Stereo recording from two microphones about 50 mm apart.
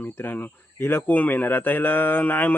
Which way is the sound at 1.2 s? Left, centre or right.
Left.